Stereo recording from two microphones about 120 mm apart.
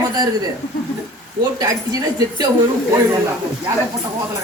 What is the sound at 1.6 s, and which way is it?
Speech, 30° right (ahead or behind).